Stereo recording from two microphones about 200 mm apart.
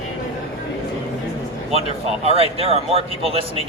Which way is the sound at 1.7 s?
30° right (ahead or behind).